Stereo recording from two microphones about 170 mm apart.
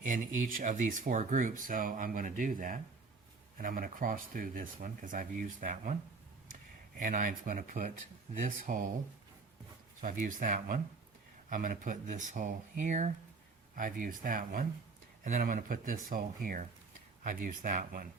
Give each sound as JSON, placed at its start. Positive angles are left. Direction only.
{"t": 0.0, "sound": "speech", "side_deg": -50}
{"t": 7.0, "sound": "speech", "side_deg": -50}
{"t": 10.0, "sound": "speech", "side_deg": -50}